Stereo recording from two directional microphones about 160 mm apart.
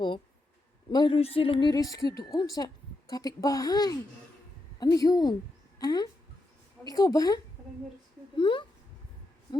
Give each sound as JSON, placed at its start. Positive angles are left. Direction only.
{"t": 0.9, "sound": "a woman's voice", "side_deg": 30}
{"t": 8.4, "sound": "speech", "side_deg": 30}